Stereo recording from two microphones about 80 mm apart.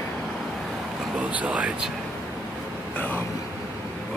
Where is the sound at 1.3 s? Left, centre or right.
Centre.